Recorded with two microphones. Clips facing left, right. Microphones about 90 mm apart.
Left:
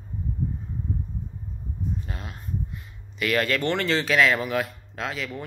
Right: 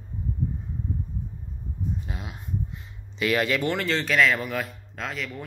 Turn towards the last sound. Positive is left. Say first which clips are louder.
# left 2 dB
turn(degrees=0)  # may be behind; listen again after turning